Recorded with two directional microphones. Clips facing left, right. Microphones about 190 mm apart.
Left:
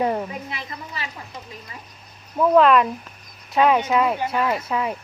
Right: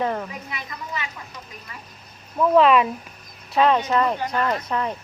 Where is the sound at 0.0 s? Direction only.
15° left (ahead or behind).